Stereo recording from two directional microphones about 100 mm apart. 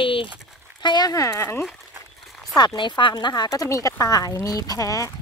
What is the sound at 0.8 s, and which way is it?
Speech, 40° left (ahead or behind).